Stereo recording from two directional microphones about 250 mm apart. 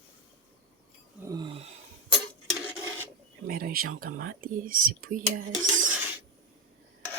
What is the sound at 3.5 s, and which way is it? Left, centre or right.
Speech, right.